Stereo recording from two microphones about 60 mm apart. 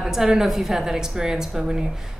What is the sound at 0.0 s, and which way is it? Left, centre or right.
A woman's voice, centre.